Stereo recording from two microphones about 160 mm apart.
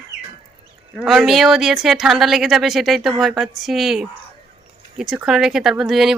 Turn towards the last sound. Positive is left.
turn(degrees=0)  # may be behind; listen again after turning